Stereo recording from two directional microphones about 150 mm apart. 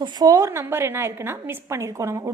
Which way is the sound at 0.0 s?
25° right (ahead or behind).